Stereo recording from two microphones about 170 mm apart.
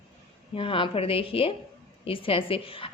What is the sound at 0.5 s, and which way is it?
A woman's voice, 30° left (ahead or behind).